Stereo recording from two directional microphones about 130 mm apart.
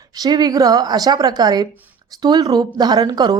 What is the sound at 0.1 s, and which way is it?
A woman's voice, 30° right (ahead or behind).